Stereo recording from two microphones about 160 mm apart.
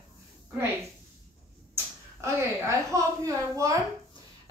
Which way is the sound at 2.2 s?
20° right (ahead or behind).